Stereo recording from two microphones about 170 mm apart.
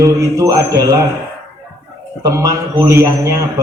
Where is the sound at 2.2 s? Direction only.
20° right (ahead or behind).